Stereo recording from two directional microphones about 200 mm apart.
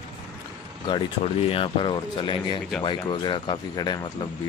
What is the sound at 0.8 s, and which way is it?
Speech, 25° left (ahead or behind).